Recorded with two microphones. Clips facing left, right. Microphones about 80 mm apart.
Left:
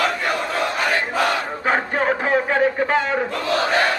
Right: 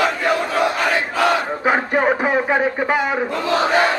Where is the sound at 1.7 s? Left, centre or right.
Centre.